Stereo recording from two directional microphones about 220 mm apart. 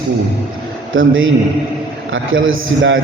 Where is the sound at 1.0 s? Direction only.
65° right (ahead or behind).